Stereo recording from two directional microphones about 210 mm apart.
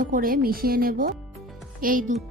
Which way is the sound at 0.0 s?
40° right (ahead or behind).